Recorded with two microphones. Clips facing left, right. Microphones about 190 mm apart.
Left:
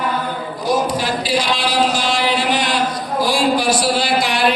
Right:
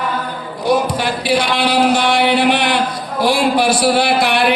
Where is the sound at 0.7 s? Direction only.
60° right (ahead or behind).